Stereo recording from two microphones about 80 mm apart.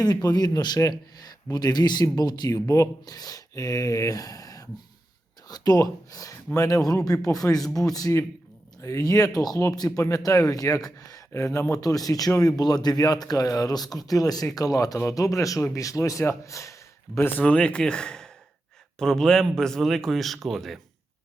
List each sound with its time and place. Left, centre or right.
0.0 s a man's voice: left
2.6 s a man's voice: left
17.2 s speech: left; by 20.7 s centre